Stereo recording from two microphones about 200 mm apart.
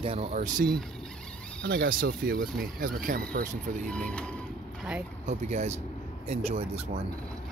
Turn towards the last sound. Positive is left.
turn(degrees=-30)  # may be behind; listen again after turning